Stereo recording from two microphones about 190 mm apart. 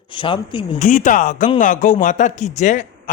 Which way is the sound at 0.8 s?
40° left (ahead or behind).